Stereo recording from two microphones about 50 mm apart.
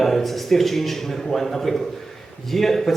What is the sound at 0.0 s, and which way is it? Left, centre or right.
A man's voice, centre.